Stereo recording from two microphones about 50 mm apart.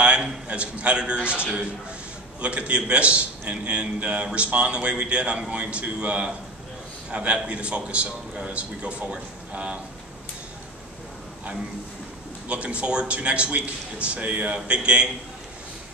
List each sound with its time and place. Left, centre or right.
0.0 s a man's voice: right
2.4 s a man's voice: right
12.4 s a man's voice: right